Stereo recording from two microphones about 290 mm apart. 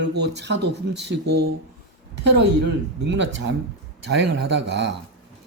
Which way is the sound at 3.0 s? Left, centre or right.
Right.